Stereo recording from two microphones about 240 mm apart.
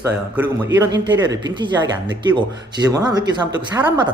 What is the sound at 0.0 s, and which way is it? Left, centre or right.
A woman's voice, centre.